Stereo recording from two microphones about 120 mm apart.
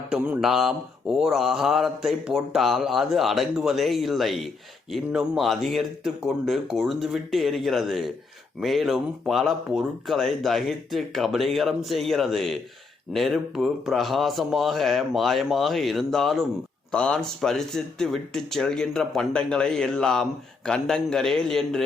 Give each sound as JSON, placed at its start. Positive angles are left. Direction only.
{"t": 0.1, "sound": "mantra", "side_deg": -5}